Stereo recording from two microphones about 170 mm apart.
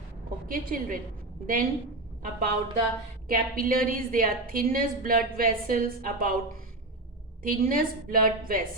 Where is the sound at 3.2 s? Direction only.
60° right (ahead or behind).